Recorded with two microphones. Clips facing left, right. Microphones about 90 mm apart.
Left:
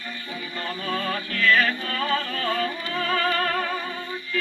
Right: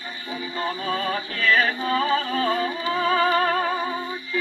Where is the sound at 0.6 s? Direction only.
20° right (ahead or behind).